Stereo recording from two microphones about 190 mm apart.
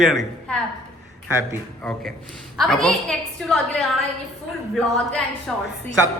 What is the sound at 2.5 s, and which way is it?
A woman's voice, centre (ahead or behind).